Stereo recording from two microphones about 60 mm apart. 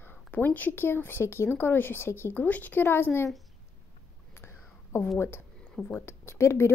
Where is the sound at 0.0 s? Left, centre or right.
Left.